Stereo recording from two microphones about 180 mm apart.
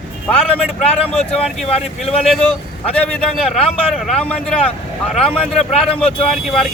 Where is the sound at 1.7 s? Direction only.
35° left (ahead or behind).